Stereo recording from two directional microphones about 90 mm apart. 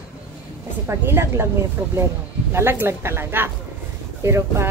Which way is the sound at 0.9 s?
25° right (ahead or behind).